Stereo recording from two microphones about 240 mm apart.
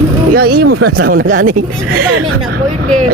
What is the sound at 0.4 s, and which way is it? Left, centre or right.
Speech, right.